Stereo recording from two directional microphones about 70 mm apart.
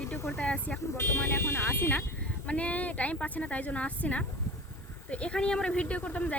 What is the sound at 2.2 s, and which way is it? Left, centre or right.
A woman's voice, centre.